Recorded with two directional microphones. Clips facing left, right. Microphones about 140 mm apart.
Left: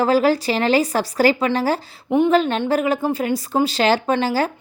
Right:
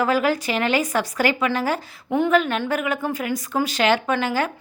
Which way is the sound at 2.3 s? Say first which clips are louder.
Left 3 dB; 30° left (ahead or behind).